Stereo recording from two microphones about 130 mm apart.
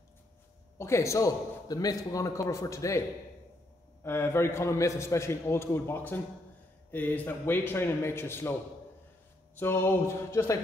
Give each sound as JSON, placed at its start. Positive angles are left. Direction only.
{"t": 0.7, "sound": "a man's voice", "side_deg": 20}
{"t": 4.0, "sound": "a man's voice", "side_deg": 20}
{"t": 9.6, "sound": "a man's voice", "side_deg": 20}